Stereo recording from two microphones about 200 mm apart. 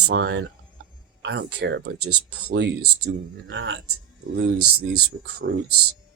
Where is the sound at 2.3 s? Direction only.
55° right (ahead or behind).